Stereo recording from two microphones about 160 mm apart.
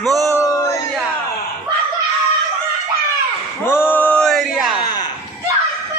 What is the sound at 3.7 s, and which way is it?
Male singing, 15° left (ahead or behind).